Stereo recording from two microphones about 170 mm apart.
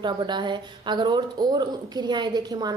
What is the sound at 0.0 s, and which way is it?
Speech, 25° right (ahead or behind).